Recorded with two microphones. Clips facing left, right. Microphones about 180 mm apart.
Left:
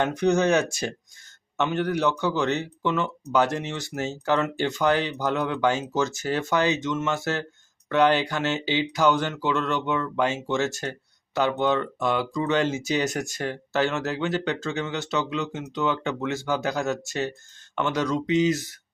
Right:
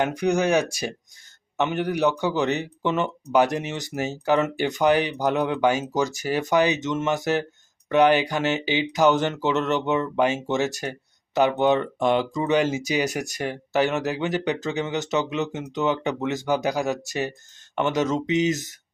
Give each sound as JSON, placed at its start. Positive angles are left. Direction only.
{"t": 0.1, "sound": "speech", "side_deg": -10}